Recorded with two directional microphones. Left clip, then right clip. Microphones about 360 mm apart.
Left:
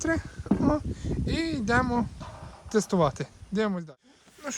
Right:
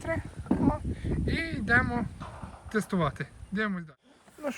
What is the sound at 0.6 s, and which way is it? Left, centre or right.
Speech, centre.